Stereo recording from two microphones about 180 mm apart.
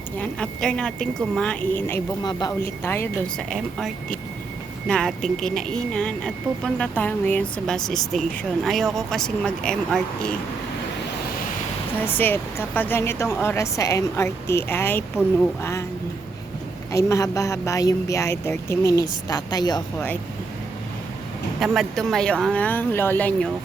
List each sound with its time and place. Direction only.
0.2 s a woman's voice: 5° left (ahead or behind)
2.2 s a woman's voice: 20° left (ahead or behind)
11.9 s speech: 10° left (ahead or behind)
16.9 s speech: 15° left (ahead or behind)
21.7 s speech: centre (ahead or behind)